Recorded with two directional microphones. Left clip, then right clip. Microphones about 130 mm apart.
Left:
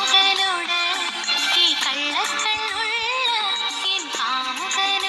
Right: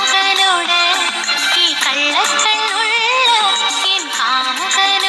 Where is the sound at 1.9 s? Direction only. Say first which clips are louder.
Right 8 dB; 40° right (ahead or behind); by 3.9 s 65° right (ahead or behind).